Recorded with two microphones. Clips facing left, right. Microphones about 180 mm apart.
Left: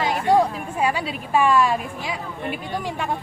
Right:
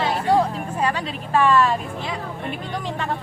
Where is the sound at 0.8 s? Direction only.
10° left (ahead or behind).